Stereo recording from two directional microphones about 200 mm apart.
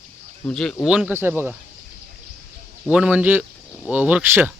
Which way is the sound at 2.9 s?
5° right (ahead or behind).